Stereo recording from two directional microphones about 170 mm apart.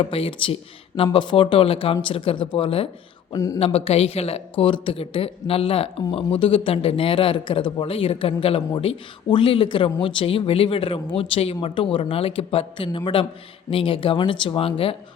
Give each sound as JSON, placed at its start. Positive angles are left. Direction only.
{"t": 0.0, "sound": "a woman's voice", "side_deg": 35}
{"t": 3.3, "sound": "speech", "side_deg": 20}
{"t": 3.6, "sound": "a woman's voice", "side_deg": 35}